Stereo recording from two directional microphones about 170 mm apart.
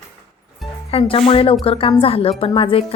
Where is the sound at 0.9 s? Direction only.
35° left (ahead or behind).